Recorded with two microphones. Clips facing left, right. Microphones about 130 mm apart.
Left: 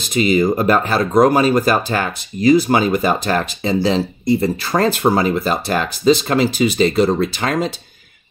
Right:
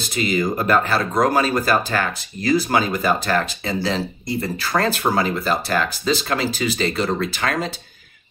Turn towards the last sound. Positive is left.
turn(degrees=20)  # may be behind; listen again after turning